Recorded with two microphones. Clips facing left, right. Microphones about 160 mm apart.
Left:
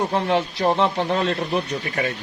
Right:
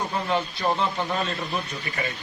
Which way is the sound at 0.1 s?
75° left (ahead or behind).